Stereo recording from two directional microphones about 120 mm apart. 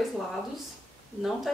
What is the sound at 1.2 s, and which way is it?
Speech, centre (ahead or behind).